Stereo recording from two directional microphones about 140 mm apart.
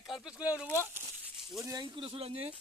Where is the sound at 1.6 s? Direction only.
25° right (ahead or behind).